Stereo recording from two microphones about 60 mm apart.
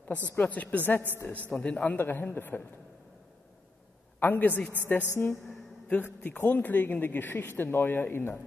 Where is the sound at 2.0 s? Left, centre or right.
Left.